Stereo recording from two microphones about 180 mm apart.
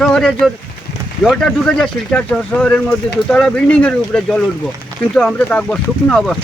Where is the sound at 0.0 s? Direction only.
5° left (ahead or behind).